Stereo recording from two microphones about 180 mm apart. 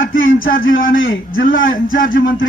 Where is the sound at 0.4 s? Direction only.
90° left.